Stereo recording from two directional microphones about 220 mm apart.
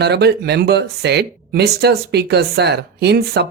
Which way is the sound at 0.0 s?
50° right (ahead or behind).